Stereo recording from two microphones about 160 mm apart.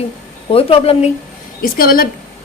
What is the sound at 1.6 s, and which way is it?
Speech, 65° left (ahead or behind).